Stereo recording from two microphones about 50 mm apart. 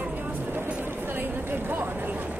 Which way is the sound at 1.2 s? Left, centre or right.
Right.